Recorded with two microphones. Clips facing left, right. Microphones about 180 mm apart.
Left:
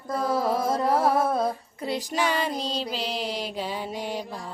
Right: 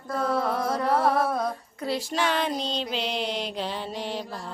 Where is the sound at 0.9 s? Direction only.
5° left (ahead or behind).